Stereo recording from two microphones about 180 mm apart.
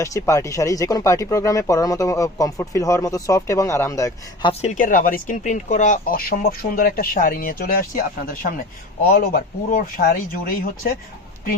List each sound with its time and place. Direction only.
0.0 s speech: 15° left (ahead or behind)
4.6 s speech: 45° left (ahead or behind)